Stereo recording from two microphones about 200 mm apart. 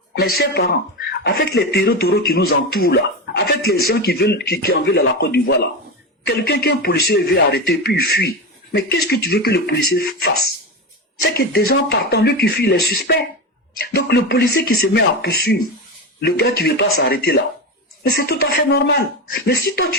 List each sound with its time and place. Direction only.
0.1 s speech: 55° left (ahead or behind)